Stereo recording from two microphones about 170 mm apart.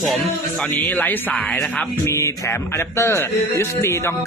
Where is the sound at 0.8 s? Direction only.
10° left (ahead or behind).